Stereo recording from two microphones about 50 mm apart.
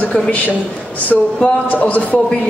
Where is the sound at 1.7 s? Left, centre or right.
Left.